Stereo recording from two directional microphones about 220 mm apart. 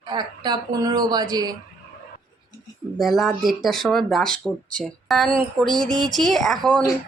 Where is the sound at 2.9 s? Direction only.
Centre (ahead or behind).